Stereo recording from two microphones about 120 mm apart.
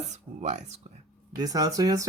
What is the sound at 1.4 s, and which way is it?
Speech, 30° right (ahead or behind).